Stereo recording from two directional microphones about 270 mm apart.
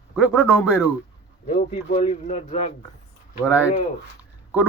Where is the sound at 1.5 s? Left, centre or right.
Left.